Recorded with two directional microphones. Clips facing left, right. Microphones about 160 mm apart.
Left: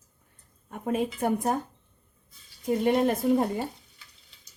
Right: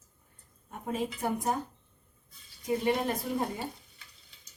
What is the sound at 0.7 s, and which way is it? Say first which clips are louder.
Speech: left 5 dB; 65° left (ahead or behind).